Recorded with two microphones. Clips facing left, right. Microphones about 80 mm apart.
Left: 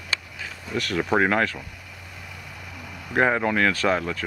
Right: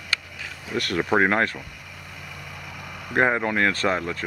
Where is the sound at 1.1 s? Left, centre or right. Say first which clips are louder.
Right 1 dB; right.